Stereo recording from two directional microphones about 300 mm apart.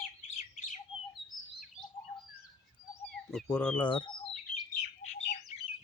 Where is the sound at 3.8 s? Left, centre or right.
Centre.